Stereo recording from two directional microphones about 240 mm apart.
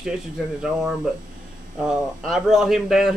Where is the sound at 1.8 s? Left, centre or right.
Centre.